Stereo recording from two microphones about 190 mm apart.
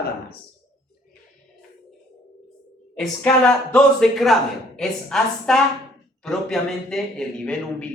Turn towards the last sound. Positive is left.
turn(degrees=5)  # may be behind; listen again after turning